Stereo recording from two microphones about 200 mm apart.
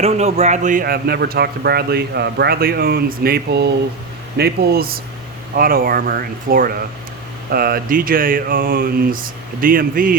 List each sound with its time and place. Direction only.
0.0 s a man's voice: 30° right (ahead or behind)